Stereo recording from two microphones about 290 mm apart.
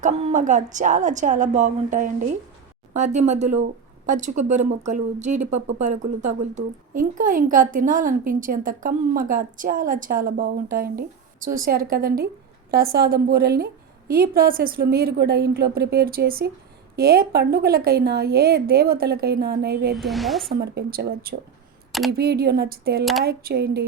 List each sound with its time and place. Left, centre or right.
0.0 s a woman's voice: right
20.0 s a woman's voice: centre
20.5 s a woman's voice: right